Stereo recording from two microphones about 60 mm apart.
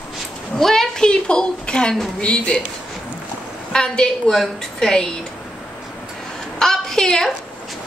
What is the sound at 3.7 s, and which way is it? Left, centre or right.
A woman's voice, centre.